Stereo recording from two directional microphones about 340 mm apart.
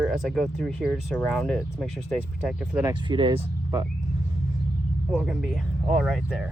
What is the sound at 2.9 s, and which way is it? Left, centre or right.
Speech, centre.